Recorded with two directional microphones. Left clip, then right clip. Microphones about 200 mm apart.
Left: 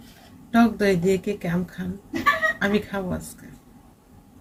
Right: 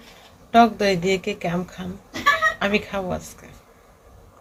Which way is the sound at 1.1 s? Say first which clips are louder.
Right 1 dB; 10° left (ahead or behind).